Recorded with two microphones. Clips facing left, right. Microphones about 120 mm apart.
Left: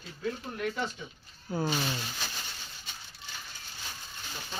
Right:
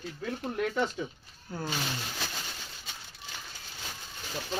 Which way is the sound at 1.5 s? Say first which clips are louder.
Left 6 dB; 5° left (ahead or behind).